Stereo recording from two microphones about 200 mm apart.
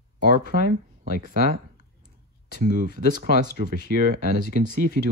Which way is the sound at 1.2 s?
50° right (ahead or behind).